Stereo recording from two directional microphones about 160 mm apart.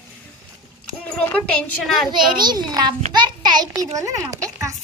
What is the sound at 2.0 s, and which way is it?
A child's voice, 25° right (ahead or behind).